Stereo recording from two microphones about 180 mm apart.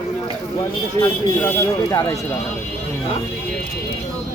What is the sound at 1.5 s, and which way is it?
Speech, 15° left (ahead or behind).